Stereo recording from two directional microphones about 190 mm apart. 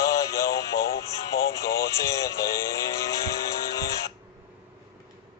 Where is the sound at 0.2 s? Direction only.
15° left (ahead or behind).